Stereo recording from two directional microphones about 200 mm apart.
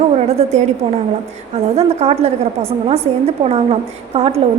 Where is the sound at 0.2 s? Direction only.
35° right (ahead or behind).